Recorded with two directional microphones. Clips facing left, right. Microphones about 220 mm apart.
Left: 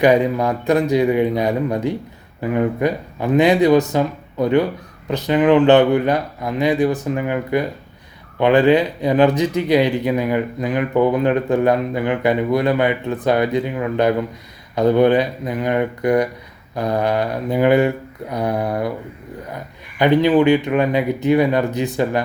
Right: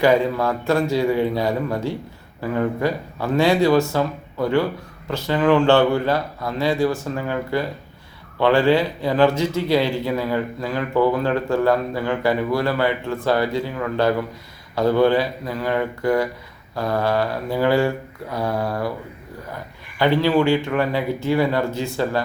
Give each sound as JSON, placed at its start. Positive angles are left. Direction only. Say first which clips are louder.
{"t": 0.0, "sound": "speech", "louder": "left 3 dB", "side_deg": 20}
{"t": 20.0, "sound": "speech", "louder": "left 4 dB", "side_deg": 20}